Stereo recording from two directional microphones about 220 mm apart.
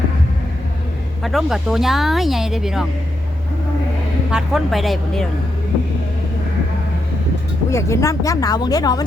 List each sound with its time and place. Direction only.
1.2 s speech: centre (ahead or behind)
4.3 s speech: 5° right (ahead or behind)
7.7 s speech: 15° left (ahead or behind)